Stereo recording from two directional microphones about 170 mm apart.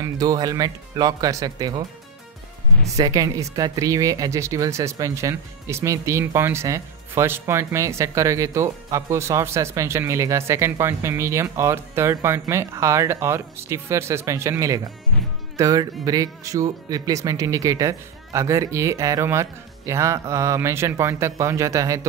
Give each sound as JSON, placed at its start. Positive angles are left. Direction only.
{"t": 0.0, "sound": "speech", "side_deg": -20}
{"t": 2.9, "sound": "speech", "side_deg": -20}